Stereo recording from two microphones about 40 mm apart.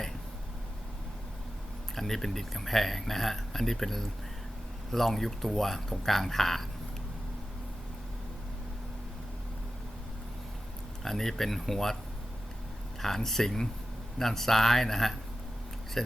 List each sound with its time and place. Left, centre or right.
2.0 s speech: centre
11.0 s speech: centre
13.0 s speech: centre